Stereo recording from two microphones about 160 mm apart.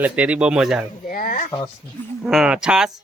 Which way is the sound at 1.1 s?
60° left (ahead or behind).